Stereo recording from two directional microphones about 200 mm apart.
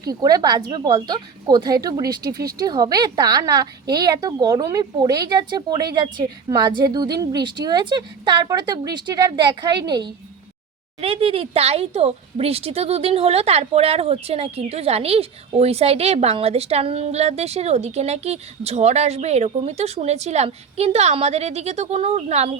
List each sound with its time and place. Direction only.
0.0 s speech: 20° right (ahead or behind)